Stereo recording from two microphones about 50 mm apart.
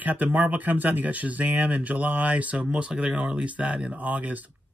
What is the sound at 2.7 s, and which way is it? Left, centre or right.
Speech, centre.